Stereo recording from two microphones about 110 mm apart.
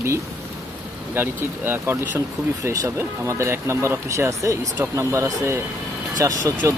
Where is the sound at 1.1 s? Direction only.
20° right (ahead or behind).